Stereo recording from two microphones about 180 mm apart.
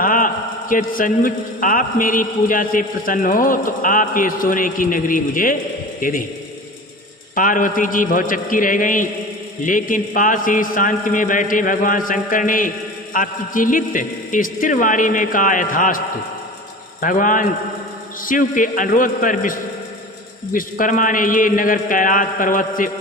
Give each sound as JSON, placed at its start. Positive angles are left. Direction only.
{"t": 0.0, "sound": "a sound", "side_deg": 50}
{"t": 0.7, "sound": "a man's voice", "side_deg": 50}
{"t": 7.3, "sound": "a man's voice", "side_deg": 50}
{"t": 17.0, "sound": "a man's voice", "side_deg": 50}